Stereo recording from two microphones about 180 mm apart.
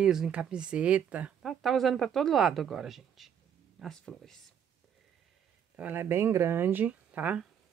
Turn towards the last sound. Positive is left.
turn(degrees=-10)  # may be behind; listen again after turning